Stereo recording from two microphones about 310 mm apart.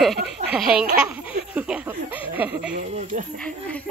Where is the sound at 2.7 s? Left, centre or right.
Right.